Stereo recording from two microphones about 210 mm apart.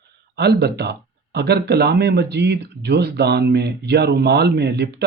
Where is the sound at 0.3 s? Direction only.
50° right (ahead or behind).